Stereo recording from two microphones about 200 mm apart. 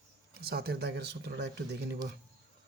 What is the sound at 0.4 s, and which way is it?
Speech, 50° right (ahead or behind).